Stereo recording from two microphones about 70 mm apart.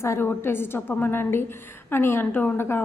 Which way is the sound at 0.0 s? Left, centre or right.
Left.